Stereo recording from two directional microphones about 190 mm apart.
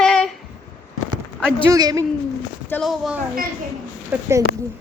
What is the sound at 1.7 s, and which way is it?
Speech, 20° right (ahead or behind).